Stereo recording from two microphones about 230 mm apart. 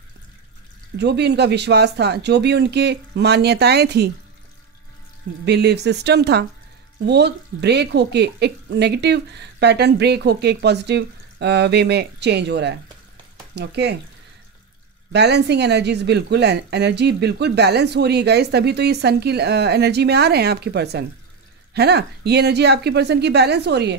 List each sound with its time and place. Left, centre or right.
0.9 s speech: right
5.4 s speech: right
15.1 s speech: right